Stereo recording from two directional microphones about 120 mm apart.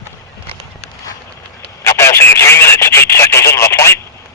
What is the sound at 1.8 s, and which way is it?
Telephone, 20° left (ahead or behind).